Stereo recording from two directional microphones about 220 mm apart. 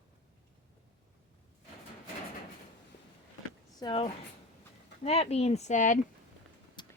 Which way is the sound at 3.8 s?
20° left (ahead or behind).